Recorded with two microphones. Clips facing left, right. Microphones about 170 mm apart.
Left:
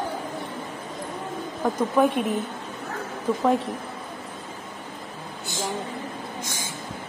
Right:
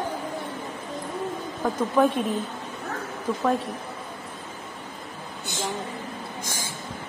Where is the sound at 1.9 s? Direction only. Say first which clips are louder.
Even; 15° left (ahead or behind).